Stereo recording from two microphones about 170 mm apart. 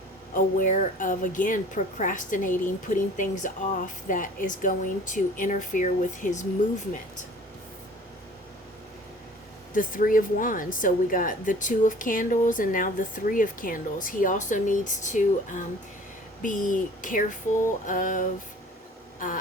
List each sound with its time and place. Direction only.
0.3 s a woman's voice: 50° left (ahead or behind)
9.7 s a woman's voice: 55° left (ahead or behind)